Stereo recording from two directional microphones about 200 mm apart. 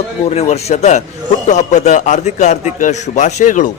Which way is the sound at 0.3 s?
30° left (ahead or behind).